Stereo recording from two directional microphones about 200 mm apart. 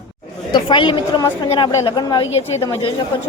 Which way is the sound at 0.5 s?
25° left (ahead or behind).